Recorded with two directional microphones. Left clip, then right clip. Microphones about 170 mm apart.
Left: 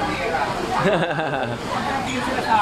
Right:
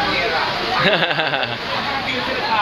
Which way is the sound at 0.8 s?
15° left (ahead or behind).